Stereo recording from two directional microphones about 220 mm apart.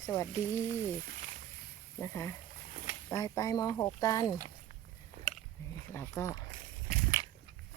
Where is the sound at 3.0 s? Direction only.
15° left (ahead or behind).